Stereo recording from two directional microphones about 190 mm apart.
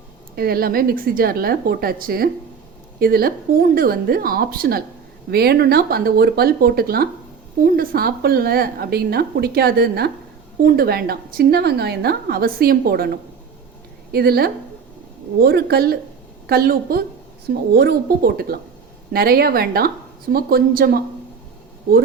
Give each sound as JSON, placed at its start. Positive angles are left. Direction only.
{"t": 0.3, "sound": "a woman's voice", "side_deg": -50}